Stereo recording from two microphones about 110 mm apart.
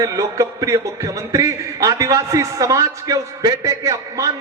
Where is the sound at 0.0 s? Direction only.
30° right (ahead or behind).